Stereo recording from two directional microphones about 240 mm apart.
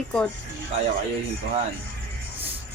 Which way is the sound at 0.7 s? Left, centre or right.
Right.